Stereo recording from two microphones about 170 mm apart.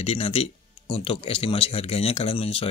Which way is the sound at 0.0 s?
35° left (ahead or behind).